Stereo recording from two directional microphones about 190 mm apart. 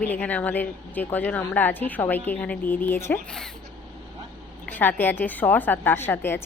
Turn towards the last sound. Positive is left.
turn(degrees=10)  # may be behind; listen again after turning